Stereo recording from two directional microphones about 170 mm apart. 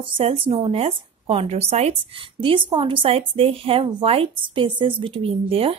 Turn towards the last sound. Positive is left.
turn(degrees=-35)  # may be behind; listen again after turning